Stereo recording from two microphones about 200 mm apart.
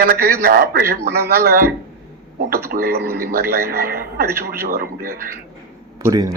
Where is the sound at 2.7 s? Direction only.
50° right (ahead or behind).